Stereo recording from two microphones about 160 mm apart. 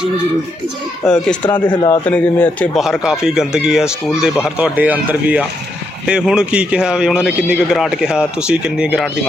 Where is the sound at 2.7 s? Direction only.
Centre (ahead or behind).